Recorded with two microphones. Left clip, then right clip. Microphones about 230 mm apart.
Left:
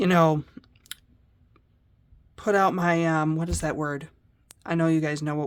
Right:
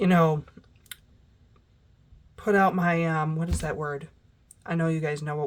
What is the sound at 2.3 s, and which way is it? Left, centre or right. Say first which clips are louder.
Speech: even; left.